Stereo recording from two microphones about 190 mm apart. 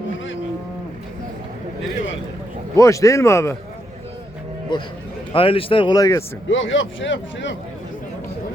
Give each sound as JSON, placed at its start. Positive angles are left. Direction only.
{"t": 2.7, "sound": "speech", "side_deg": 15}
{"t": 5.3, "sound": "speech", "side_deg": 30}
{"t": 6.5, "sound": "speech", "side_deg": 90}